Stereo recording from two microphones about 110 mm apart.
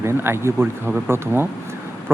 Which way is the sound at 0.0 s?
20° right (ahead or behind).